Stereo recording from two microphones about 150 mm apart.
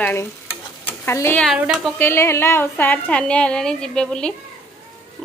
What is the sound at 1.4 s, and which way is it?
Speech, 5° right (ahead or behind).